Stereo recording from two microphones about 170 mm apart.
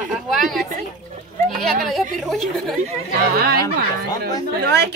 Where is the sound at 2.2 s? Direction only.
Centre (ahead or behind).